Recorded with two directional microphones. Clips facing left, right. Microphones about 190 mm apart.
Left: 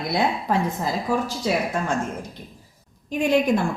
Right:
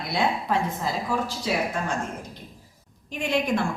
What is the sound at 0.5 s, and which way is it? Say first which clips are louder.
Speech: left 3 dB; 40° left (ahead or behind).